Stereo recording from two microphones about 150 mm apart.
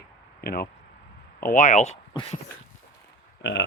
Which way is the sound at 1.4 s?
70° left (ahead or behind).